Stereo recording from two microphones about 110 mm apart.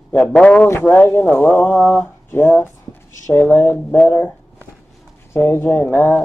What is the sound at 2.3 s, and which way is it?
Speech, 20° left (ahead or behind).